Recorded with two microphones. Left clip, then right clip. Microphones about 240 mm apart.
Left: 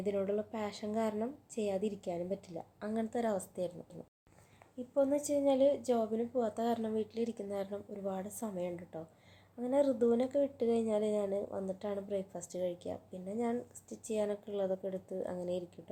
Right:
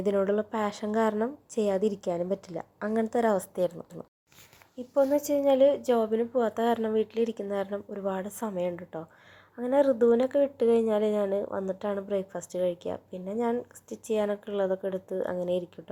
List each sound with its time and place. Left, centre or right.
0.0 s speech: right
4.9 s speech: centre